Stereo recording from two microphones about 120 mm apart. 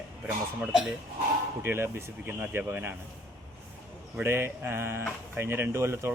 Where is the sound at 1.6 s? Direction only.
20° right (ahead or behind).